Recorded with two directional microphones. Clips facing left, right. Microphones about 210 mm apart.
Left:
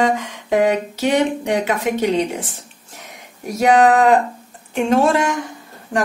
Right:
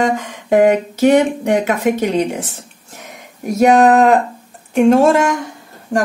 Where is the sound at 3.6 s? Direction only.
45° right (ahead or behind).